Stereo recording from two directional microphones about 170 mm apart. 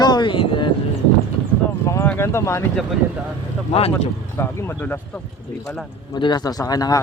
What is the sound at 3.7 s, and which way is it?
Speech, 35° left (ahead or behind).